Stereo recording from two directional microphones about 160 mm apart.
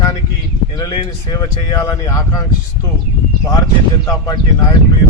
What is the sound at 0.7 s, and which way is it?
Speech, 25° left (ahead or behind).